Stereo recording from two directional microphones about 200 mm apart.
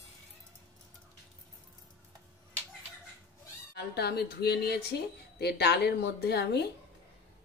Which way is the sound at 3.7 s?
55° left (ahead or behind).